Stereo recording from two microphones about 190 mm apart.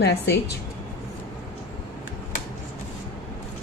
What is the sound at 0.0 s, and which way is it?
Speech, 60° left (ahead or behind).